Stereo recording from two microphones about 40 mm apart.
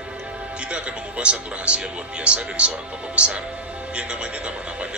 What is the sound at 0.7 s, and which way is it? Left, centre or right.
Speech, right.